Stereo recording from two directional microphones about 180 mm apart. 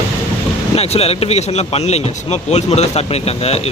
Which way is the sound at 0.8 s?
35° left (ahead or behind).